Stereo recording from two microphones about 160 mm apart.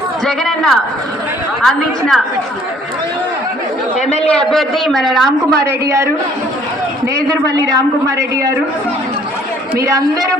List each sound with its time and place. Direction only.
0.3 s a man's voice: centre (ahead or behind)
4.2 s a man's voice: 5° left (ahead or behind)
5.5 s a man's voice: 90° right
7.8 s a man's voice: 20° right (ahead or behind)